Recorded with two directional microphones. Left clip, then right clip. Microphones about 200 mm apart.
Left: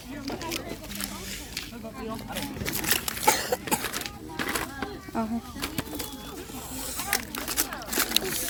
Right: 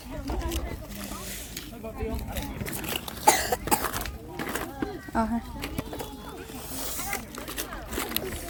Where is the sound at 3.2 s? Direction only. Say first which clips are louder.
Right 4 dB; 45° right (ahead or behind).